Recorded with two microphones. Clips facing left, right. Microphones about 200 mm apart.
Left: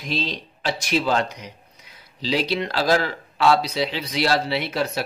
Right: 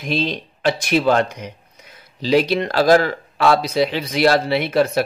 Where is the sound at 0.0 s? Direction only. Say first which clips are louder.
Right 5 dB; 55° right (ahead or behind).